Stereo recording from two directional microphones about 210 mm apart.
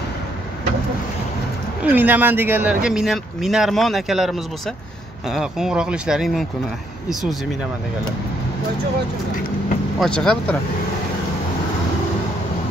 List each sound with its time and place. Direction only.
1.9 s speech: 10° right (ahead or behind)
9.9 s speech: 5° left (ahead or behind)